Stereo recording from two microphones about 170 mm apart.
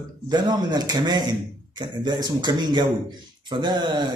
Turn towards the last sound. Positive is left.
turn(degrees=-25)  # may be behind; listen again after turning